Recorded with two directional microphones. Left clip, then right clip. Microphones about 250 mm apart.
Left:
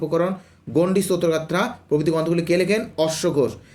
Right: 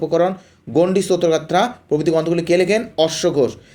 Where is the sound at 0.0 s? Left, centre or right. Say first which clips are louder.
Right 5 dB; centre.